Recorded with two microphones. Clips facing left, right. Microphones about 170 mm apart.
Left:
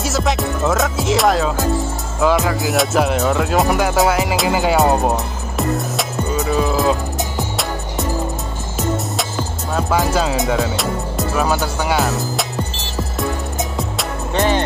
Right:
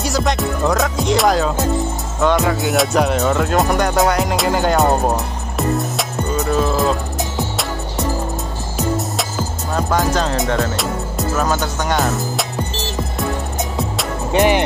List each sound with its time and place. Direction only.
0.0 s music: centre (ahead or behind)
9.8 s speech: centre (ahead or behind)
13.2 s music: centre (ahead or behind)
14.3 s music: 15° right (ahead or behind)